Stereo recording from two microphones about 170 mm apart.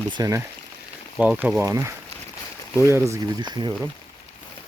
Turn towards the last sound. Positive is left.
turn(degrees=-25)  # may be behind; listen again after turning